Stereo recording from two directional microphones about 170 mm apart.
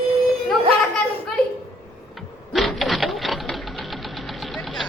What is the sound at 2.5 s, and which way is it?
Sewing machine, centre (ahead or behind).